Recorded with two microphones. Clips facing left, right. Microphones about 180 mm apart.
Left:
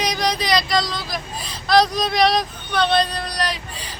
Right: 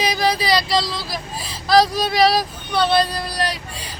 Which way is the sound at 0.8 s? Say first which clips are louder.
Even; 5° right (ahead or behind).